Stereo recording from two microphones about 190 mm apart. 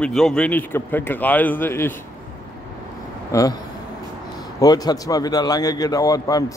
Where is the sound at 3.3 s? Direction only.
15° left (ahead or behind).